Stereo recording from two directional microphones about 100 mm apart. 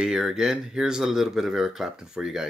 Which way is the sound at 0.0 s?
5° right (ahead or behind).